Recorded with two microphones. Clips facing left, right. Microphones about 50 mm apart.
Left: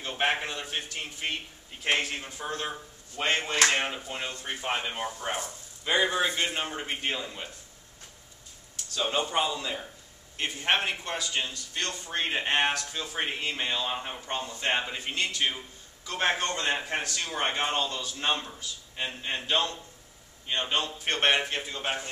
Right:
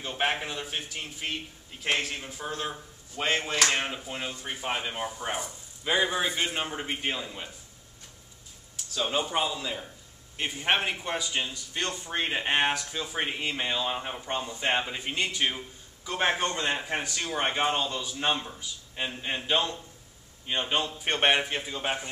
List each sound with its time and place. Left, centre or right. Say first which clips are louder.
0.0 s a sound: left 1 dB; centre
1.2 s a man's voice: left 1 dB; centre
3.6 s speech: left 2 dB; centre
4.0 s speech: even; centre
8.7 s a man's voice: even; centre
12.2 s a man's voice: even; centre
14.4 s a man's voice: right 1 dB; centre
14.7 s a man's voice: right 1 dB; centre